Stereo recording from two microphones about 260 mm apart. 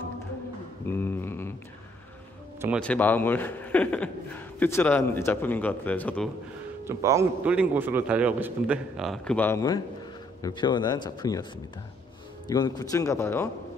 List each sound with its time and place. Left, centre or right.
0.8 s a sound: centre
2.8 s a man's voice: centre
6.8 s a man's voice: centre